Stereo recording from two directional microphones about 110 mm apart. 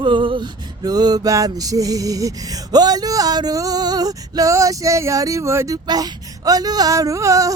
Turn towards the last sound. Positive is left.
turn(degrees=-30)  # may be behind; listen again after turning